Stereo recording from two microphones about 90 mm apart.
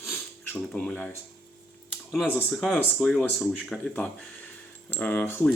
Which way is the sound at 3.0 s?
5° left (ahead or behind).